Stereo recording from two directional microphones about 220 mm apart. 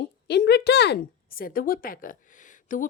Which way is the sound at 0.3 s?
50° left (ahead or behind).